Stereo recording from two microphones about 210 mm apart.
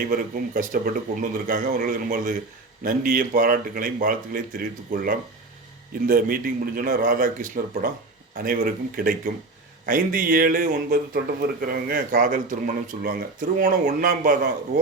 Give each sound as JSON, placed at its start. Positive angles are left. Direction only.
{"t": 0.1, "sound": "a man's voice", "side_deg": -40}